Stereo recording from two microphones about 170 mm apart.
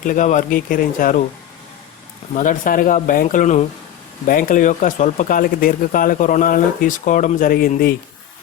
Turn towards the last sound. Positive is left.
turn(degrees=55)  # may be behind; listen again after turning